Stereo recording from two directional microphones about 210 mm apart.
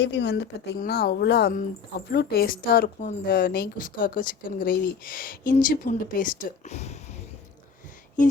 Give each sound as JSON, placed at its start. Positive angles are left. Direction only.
{"t": 0.0, "sound": "a woman's voice", "side_deg": 55}